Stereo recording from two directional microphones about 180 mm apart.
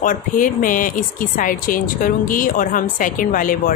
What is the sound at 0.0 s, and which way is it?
Speech, 50° left (ahead or behind).